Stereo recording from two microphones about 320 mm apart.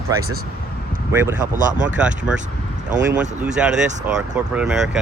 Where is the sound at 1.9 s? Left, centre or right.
Centre.